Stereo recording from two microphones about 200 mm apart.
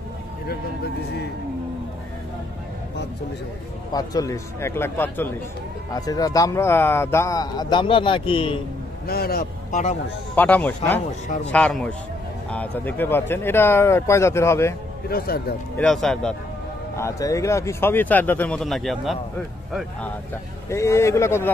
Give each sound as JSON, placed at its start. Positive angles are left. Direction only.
{"t": 3.9, "sound": "speech", "side_deg": 20}
{"t": 9.0, "sound": "a man's voice", "side_deg": 50}
{"t": 10.3, "sound": "speech", "side_deg": 10}
{"t": 15.0, "sound": "speech", "side_deg": 50}
{"t": 15.8, "sound": "speech", "side_deg": 0}
{"t": 16.9, "sound": "speech", "side_deg": 15}
{"t": 20.7, "sound": "speech", "side_deg": 15}